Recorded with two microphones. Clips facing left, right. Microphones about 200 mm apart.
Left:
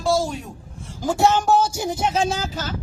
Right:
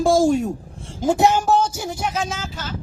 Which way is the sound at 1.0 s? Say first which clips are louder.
Right 2 dB; 20° right (ahead or behind).